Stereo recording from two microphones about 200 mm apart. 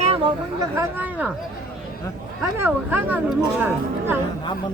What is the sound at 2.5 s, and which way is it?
Speech, 10° right (ahead or behind).